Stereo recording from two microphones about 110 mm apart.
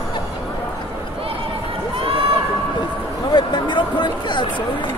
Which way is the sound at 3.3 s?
45° left (ahead or behind).